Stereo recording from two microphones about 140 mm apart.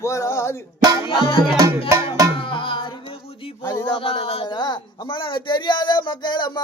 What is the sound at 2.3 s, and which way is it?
Music, 35° left (ahead or behind).